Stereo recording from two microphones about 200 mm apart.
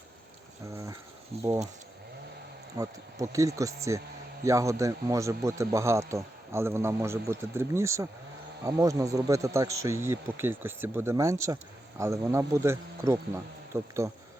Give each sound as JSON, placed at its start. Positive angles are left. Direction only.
{"t": 2.7, "sound": "a man's voice", "side_deg": -15}